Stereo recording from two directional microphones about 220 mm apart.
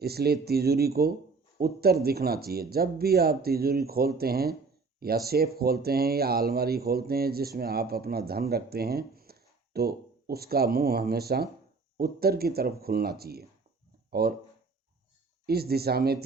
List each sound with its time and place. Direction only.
0.0 s speech: 45° right (ahead or behind)
15.4 s speech: 45° right (ahead or behind)